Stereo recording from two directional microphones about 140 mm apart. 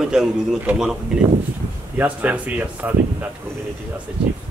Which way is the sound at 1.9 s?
10° right (ahead or behind).